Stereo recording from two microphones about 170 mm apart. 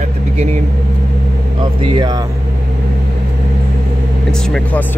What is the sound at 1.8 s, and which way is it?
Speech, 30° right (ahead or behind).